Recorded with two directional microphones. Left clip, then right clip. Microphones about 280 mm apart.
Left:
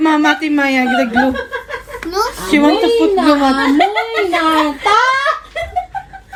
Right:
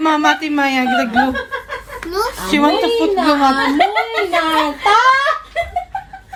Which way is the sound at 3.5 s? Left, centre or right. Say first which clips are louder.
Left 1 dB; right.